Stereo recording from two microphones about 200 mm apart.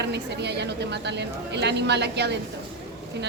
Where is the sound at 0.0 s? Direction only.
60° right (ahead or behind).